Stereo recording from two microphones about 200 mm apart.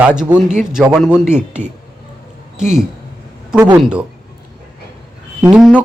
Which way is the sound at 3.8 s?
5° right (ahead or behind).